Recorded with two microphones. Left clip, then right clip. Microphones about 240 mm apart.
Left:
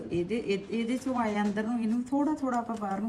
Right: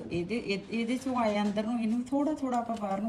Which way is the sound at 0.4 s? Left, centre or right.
Centre.